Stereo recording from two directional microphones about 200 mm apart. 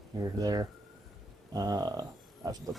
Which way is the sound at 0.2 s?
20° right (ahead or behind).